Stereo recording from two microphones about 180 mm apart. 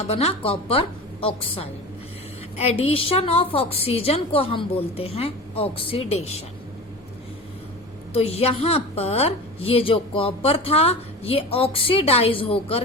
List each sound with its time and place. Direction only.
0.1 s a woman's voice: 35° left (ahead or behind)
8.1 s a woman's voice: 35° left (ahead or behind)